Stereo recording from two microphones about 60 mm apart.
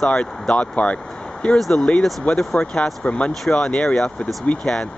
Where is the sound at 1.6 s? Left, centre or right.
Centre.